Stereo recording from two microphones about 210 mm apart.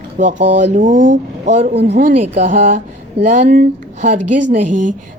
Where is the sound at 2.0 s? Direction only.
40° right (ahead or behind).